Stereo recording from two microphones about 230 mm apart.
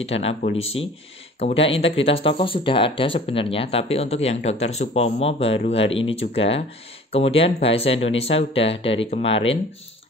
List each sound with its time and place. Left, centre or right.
0.0 s speech: left